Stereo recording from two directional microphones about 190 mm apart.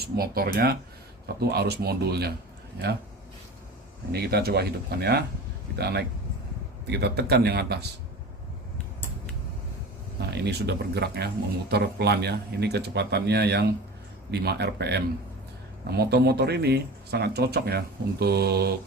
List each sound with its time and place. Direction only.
0.0 s speech: 55° right (ahead or behind)
4.1 s speech: 55° right (ahead or behind)
10.3 s speech: 60° right (ahead or behind)